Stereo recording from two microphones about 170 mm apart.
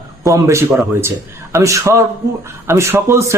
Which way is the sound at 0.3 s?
20° right (ahead or behind).